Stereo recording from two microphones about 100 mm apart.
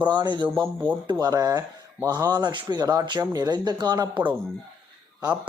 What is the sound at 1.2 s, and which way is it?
Speech, 35° right (ahead or behind).